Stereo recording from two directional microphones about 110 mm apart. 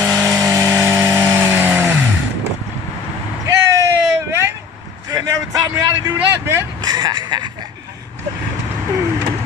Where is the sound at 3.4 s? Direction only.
30° right (ahead or behind).